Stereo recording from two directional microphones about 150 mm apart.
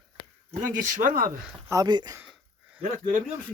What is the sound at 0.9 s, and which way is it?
Speech, 65° right (ahead or behind).